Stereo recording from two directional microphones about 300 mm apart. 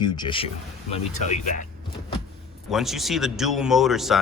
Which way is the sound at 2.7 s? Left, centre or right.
Centre.